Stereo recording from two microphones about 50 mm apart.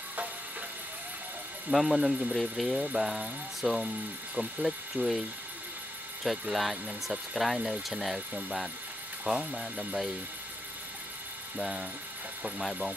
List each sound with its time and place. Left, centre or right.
0.1 s a sound: right
1.7 s speech: centre
6.5 s speech: centre
9.3 s speech: right
11.5 s speech: centre